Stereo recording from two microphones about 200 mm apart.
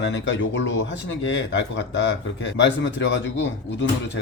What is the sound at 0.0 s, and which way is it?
Speech, 65° left (ahead or behind).